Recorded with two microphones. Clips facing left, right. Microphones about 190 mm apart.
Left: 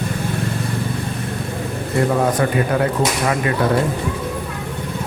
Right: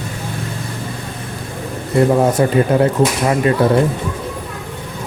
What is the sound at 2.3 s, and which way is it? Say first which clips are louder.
Speech: right 4 dB; 25° right (ahead or behind).